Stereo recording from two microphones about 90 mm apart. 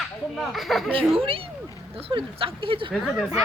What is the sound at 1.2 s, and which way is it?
Speech, 90° right.